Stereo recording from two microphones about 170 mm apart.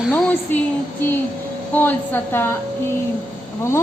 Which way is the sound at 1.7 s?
10° left (ahead or behind).